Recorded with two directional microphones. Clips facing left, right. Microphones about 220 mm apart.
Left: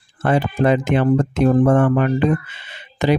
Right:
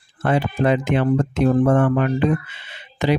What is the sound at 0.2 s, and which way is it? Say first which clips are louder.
Speech: left 2 dB; 45° left (ahead or behind).